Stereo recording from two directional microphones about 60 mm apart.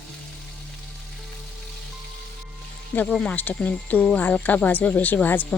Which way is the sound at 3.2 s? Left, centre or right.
Left.